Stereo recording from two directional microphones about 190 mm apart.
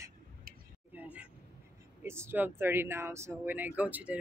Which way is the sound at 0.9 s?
5° right (ahead or behind).